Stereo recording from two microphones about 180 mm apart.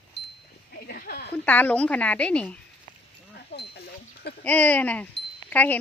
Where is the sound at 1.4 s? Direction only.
10° left (ahead or behind).